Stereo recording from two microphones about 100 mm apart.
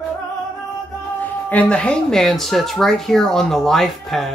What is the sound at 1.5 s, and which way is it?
Speech, 15° left (ahead or behind).